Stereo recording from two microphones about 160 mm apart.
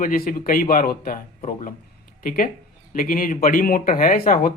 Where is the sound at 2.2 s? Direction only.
60° left (ahead or behind).